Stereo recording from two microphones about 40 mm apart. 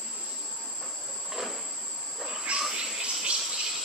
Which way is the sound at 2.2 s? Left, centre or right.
Right.